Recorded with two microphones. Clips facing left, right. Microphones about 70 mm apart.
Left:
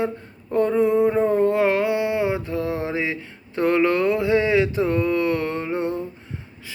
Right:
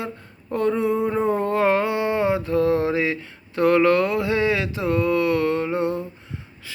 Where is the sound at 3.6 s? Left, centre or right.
Left.